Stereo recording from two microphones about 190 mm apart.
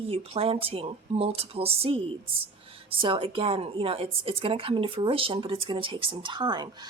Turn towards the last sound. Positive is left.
turn(degrees=-25)  # may be behind; listen again after turning